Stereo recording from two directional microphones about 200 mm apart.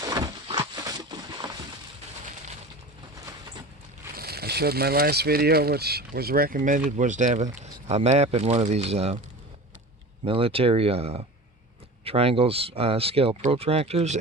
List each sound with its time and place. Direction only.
0.0 s a sound: 20° right (ahead or behind)
4.1 s speech: 50° right (ahead or behind); by 9.1 s 30° right (ahead or behind)
10.2 s speech: 25° right (ahead or behind)